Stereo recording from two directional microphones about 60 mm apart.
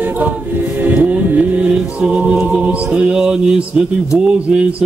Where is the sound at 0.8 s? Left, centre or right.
Right.